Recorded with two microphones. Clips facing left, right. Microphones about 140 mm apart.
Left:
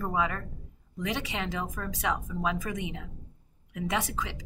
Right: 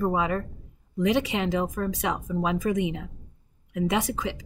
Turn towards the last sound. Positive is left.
turn(degrees=-15)  # may be behind; listen again after turning